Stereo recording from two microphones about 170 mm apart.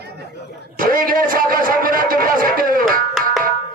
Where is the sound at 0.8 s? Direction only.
55° right (ahead or behind).